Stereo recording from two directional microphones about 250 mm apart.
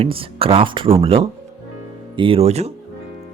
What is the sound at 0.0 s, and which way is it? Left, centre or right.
Speech, right.